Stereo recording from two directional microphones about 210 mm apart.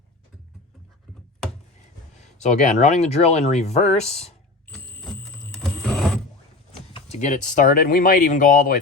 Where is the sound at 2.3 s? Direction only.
35° left (ahead or behind).